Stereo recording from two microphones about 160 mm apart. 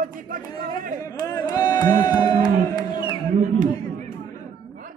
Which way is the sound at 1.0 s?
20° left (ahead or behind).